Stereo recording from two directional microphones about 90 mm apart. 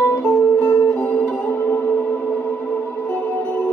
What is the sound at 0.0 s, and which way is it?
Music, 30° left (ahead or behind).